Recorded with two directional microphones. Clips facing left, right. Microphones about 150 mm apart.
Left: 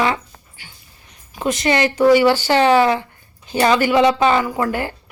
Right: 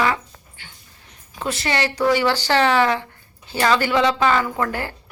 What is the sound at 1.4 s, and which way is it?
A woman's voice, 15° left (ahead or behind).